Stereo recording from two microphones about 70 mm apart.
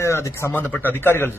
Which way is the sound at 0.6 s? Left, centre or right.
Left.